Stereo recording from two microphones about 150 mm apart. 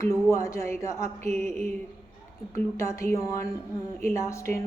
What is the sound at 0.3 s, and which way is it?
Speech, 20° left (ahead or behind).